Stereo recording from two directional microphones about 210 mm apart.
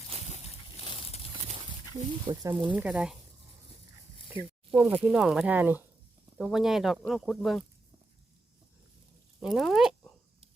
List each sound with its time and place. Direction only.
0.1 s slosh: 30° right (ahead or behind)
0.4 s a sound: 30° left (ahead or behind)
1.5 s a sound: 25° right (ahead or behind)
2.7 s speech: 5° right (ahead or behind)
4.7 s speech: 10° right (ahead or behind)
9.4 s speech: centre (ahead or behind)